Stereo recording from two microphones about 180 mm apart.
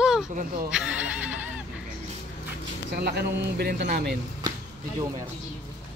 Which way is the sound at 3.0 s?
60° right (ahead or behind).